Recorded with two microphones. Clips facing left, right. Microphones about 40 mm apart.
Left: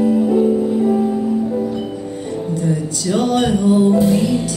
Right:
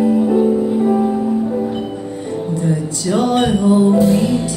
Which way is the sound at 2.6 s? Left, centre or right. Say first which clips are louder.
Even; right.